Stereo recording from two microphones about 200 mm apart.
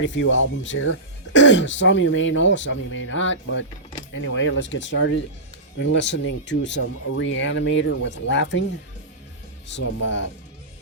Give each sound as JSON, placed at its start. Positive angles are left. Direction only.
{"t": 0.0, "sound": "speech", "side_deg": 65}
{"t": 9.6, "sound": "speech", "side_deg": 65}